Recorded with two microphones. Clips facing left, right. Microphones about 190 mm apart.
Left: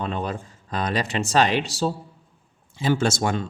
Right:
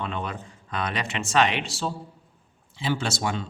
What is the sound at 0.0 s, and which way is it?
Speech, 35° left (ahead or behind).